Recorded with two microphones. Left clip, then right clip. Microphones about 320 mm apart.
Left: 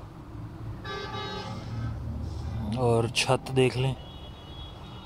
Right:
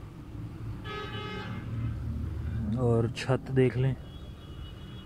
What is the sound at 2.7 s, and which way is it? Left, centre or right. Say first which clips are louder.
Speech: left 4 dB; left.